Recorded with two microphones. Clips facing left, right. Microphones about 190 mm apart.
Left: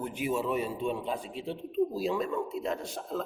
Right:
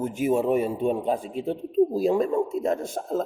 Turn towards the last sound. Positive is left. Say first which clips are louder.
# right 7 dB
turn(degrees=-45)  # may be behind; listen again after turning